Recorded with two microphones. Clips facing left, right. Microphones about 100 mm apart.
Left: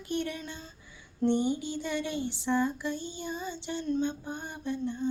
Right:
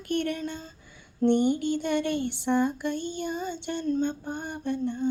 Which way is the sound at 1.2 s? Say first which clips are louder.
Right 5 dB; 60° right (ahead or behind).